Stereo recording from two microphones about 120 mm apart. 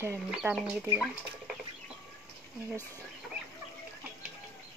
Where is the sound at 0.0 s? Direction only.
15° right (ahead or behind).